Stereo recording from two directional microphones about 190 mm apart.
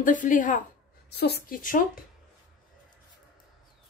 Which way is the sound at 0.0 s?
45° left (ahead or behind).